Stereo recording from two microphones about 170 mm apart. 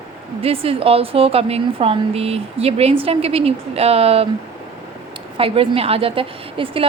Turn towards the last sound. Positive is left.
turn(degrees=-35)  # may be behind; listen again after turning